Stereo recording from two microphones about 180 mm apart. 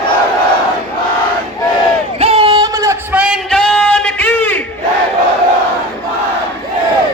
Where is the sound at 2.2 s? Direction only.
35° right (ahead or behind); by 3.2 s 20° right (ahead or behind).